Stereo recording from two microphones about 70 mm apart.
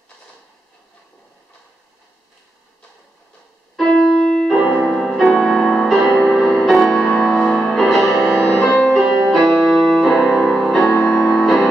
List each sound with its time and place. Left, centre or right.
3.7 s keyboard: centre
4.8 s music: centre
8.5 s music: centre
9.3 s music: centre
10.8 s music: centre
11.1 s music: left
11.3 s music: centre